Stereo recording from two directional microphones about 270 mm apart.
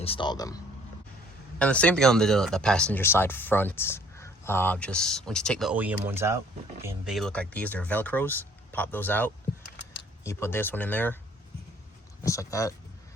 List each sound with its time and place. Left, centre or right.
0.0 s speech: centre
1.5 s speech: centre
12.2 s speech: centre